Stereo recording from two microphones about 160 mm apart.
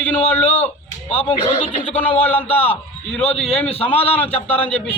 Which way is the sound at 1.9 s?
10° left (ahead or behind).